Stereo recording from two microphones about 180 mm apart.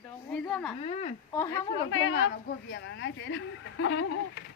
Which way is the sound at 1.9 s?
85° left.